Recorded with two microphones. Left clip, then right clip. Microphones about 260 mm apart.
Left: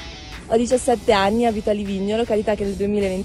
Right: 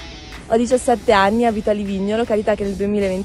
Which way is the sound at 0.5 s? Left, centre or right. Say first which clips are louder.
Right 2 dB; centre.